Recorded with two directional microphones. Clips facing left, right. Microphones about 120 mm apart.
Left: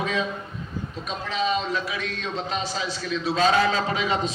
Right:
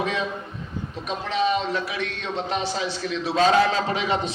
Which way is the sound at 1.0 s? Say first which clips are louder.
Right 3 dB; 65° right (ahead or behind).